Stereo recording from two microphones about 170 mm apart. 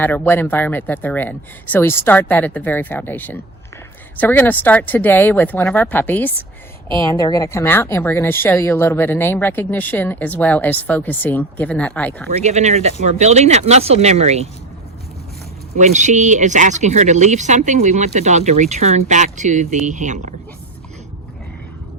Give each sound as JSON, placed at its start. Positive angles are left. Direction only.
{"t": 0.0, "sound": "a woman's voice", "side_deg": 10}
{"t": 12.3, "sound": "speech", "side_deg": -40}
{"t": 15.7, "sound": "speech", "side_deg": -45}